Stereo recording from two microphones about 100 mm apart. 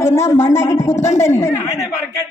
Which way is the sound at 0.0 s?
25° left (ahead or behind).